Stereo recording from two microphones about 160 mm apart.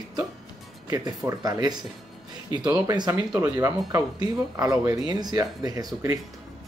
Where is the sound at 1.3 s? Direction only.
25° right (ahead or behind).